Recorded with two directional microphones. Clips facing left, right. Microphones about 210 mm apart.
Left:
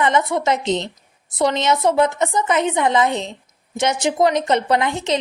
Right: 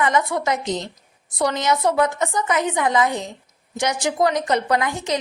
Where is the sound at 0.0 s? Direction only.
25° left (ahead or behind).